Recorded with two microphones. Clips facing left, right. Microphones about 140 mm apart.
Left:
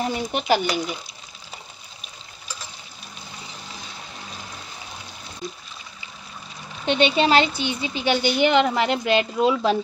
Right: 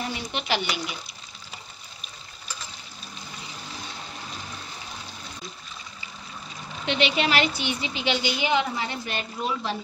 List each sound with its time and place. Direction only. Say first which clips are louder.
0.1 s speech: left 7 dB; 45° left (ahead or behind)
6.9 s speech: left 6 dB; 30° left (ahead or behind)
7.9 s speech: left 7 dB; 45° left (ahead or behind); by 9.6 s 90° left